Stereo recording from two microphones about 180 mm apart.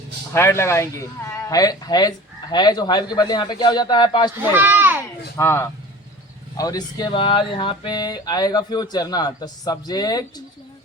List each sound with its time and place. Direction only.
0.3 s speech: 15° left (ahead or behind)
4.4 s speech: 10° right (ahead or behind)
5.4 s speech: 15° left (ahead or behind)